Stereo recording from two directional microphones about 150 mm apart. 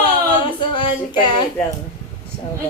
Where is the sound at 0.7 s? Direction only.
35° left (ahead or behind).